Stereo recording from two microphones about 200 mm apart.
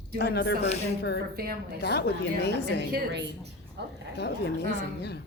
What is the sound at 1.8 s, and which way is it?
A woman's voice, 55° left (ahead or behind).